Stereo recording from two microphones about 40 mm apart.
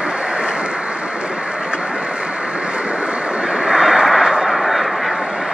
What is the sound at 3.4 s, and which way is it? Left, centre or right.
Vehicle, centre.